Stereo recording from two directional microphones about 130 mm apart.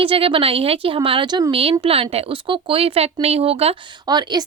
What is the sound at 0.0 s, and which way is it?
Speech, 45° right (ahead or behind).